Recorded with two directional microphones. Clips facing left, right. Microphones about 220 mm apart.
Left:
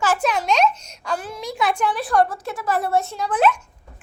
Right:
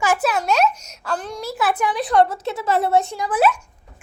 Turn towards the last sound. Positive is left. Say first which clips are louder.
# right 1 dB
turn(degrees=-5)  # may be behind; listen again after turning